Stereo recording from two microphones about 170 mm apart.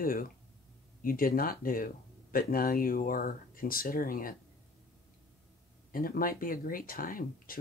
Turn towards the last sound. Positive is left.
turn(degrees=55)  # may be behind; listen again after turning